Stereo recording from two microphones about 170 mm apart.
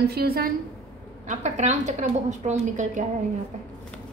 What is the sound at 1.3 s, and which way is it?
A woman's voice, 45° right (ahead or behind).